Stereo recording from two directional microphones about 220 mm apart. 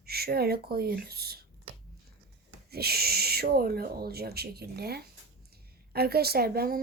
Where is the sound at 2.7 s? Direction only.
45° right (ahead or behind).